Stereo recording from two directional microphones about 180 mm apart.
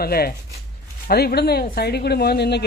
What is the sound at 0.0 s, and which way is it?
Speech, 60° left (ahead or behind).